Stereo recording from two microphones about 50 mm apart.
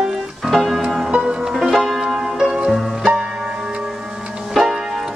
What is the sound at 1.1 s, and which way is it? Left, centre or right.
Music, right.